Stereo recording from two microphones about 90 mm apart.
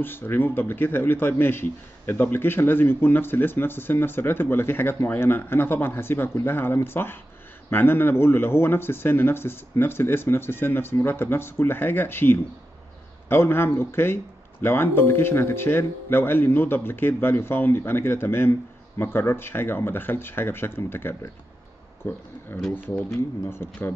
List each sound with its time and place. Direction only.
0.0 s speech: 25° left (ahead or behind)